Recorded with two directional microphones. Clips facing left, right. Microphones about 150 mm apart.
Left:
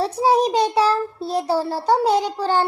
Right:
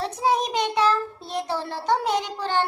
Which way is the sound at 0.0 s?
35° left (ahead or behind).